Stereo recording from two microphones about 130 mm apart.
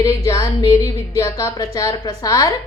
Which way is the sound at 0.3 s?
25° left (ahead or behind).